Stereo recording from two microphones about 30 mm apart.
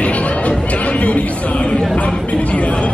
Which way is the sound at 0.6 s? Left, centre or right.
Left.